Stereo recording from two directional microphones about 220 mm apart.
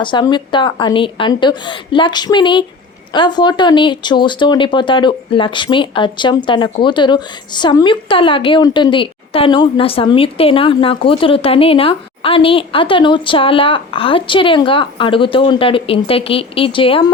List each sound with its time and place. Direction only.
0.0 s speech: 20° left (ahead or behind)